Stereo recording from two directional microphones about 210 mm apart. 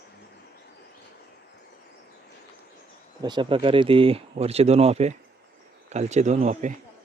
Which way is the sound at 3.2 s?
20° right (ahead or behind).